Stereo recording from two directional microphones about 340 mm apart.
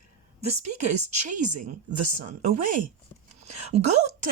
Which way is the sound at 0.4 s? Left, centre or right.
Centre.